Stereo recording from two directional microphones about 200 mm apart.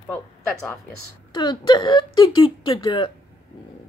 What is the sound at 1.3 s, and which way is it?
Speech, 20° left (ahead or behind).